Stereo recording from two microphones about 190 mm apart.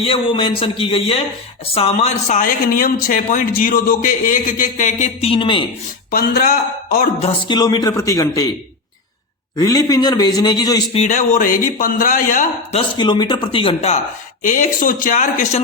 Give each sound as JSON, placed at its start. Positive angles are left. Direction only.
{"t": 0.0, "sound": "a man's voice", "side_deg": 30}
{"t": 5.3, "sound": "a man's voice", "side_deg": 25}
{"t": 6.1, "sound": "a man's voice", "side_deg": 50}
{"t": 6.8, "sound": "music", "side_deg": 50}
{"t": 7.2, "sound": "a man's voice", "side_deg": 25}
{"t": 9.6, "sound": "a man's voice", "side_deg": 20}
{"t": 10.9, "sound": "a man's voice", "side_deg": 35}
{"t": 13.0, "sound": "a man's voice", "side_deg": 25}
{"t": 14.4, "sound": "a man's voice", "side_deg": 45}